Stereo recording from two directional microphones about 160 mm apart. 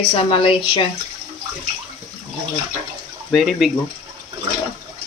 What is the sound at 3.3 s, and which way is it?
Speech, centre (ahead or behind).